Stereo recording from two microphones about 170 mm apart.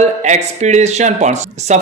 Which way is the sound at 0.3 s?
45° right (ahead or behind).